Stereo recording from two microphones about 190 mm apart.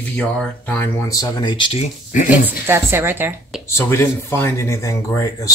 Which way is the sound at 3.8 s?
15° left (ahead or behind).